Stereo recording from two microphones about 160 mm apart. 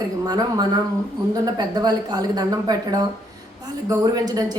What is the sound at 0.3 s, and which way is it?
A woman's voice, 20° right (ahead or behind).